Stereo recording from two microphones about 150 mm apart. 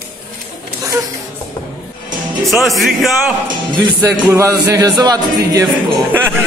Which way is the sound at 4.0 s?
20° right (ahead or behind).